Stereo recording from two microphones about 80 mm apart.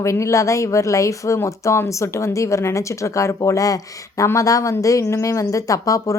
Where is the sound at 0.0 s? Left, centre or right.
Left.